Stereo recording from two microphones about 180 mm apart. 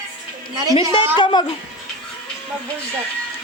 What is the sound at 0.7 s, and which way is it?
Speech, 30° left (ahead or behind).